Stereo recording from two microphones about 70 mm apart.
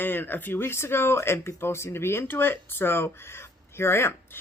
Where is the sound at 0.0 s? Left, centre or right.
Left.